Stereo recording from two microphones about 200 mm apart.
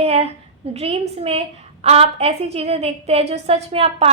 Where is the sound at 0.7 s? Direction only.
30° right (ahead or behind).